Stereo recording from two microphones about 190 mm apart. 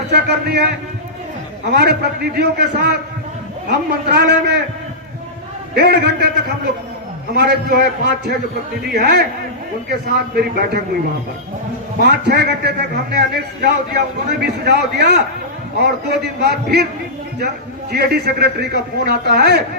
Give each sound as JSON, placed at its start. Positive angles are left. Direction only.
{"t": 0.1, "sound": "a man's voice", "side_deg": -60}
{"t": 1.7, "sound": "a man's voice", "side_deg": -60}
{"t": 5.7, "sound": "a man's voice", "side_deg": -60}
{"t": 7.3, "sound": "a man's voice", "side_deg": -60}
{"t": 10.3, "sound": "a man's voice", "side_deg": -55}
{"t": 11.9, "sound": "a man's voice", "side_deg": -60}
{"t": 17.9, "sound": "a man's voice", "side_deg": -55}